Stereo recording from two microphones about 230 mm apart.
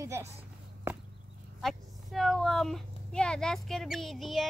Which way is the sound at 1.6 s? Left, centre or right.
Centre.